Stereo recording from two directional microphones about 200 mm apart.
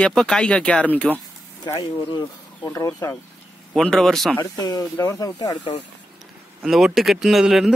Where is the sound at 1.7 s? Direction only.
20° left (ahead or behind).